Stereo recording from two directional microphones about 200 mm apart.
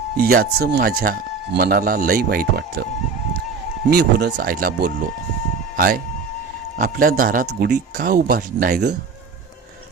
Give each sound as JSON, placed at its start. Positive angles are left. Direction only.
{"t": 0.2, "sound": "speech", "side_deg": -50}
{"t": 3.8, "sound": "speech", "side_deg": -55}